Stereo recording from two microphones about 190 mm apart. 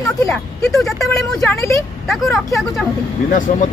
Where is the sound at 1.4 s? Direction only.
15° left (ahead or behind).